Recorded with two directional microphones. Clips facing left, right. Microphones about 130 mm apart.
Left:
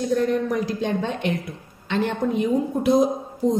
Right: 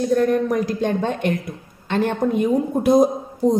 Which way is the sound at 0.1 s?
50° right (ahead or behind).